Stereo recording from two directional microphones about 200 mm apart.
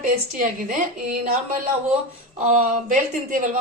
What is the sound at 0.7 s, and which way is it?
A woman's voice, 40° right (ahead or behind).